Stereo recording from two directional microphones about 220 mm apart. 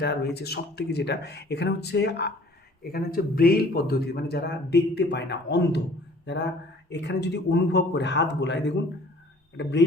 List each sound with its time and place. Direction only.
0.0 s a man's voice: 45° left (ahead or behind)
6.2 s a sound: 50° left (ahead or behind)
6.9 s a man's voice: 50° left (ahead or behind)